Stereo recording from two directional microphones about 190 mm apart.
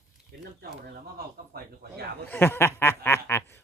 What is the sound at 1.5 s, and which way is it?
Speech, 55° right (ahead or behind).